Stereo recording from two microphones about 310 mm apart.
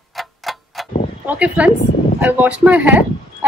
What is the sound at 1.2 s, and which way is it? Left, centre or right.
Speech, centre.